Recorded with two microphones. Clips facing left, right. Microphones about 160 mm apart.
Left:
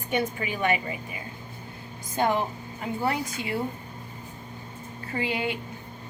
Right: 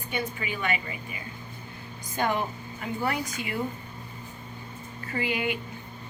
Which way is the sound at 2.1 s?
25° left (ahead or behind).